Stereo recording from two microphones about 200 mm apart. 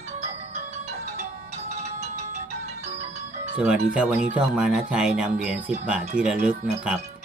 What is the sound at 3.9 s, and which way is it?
Speech, 5° right (ahead or behind).